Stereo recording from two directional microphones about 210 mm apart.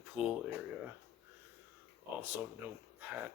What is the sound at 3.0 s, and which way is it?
Dog, 10° right (ahead or behind).